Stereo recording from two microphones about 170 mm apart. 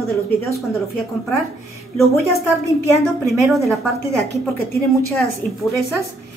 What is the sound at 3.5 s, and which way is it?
Speech, centre (ahead or behind).